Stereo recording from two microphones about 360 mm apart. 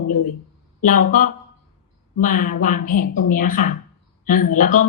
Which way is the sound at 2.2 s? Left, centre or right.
Left.